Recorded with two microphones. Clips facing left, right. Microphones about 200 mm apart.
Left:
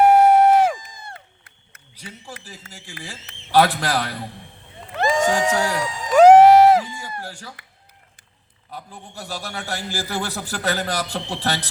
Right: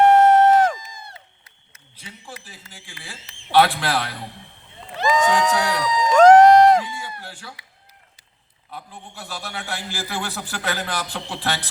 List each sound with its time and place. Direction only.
0.0 s crowd: 10° left (ahead or behind)
0.8 s a man's voice: 55° left (ahead or behind)
5.1 s a sound: 45° left (ahead or behind)
6.1 s run: 5° left (ahead or behind)
6.8 s a sound: 40° left (ahead or behind)
8.7 s a man's voice: 40° left (ahead or behind)